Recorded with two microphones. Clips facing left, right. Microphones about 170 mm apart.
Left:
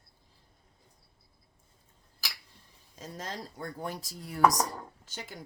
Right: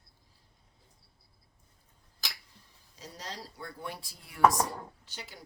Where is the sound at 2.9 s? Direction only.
50° left (ahead or behind).